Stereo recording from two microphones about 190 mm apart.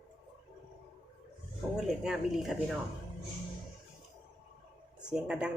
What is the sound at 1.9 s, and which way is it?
Speech, centre (ahead or behind).